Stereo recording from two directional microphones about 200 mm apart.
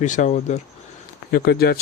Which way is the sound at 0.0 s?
40° left (ahead or behind).